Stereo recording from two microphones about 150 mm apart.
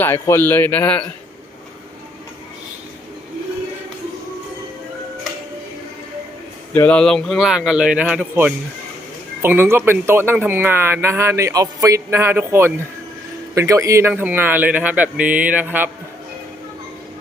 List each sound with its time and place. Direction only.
0.0 s a man's voice: 15° left (ahead or behind)
6.7 s a man's voice: 10° left (ahead or behind); by 15.9 s 10° right (ahead or behind)